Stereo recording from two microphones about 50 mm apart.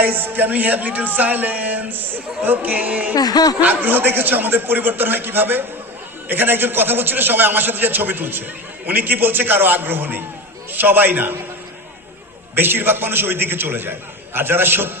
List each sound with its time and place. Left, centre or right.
0.0 s a man's voice: right
12.5 s a man's voice: right